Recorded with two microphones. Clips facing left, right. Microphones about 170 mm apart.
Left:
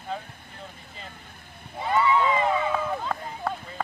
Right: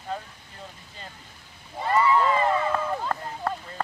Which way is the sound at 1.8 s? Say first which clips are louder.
Right 1 dB; centre (ahead or behind).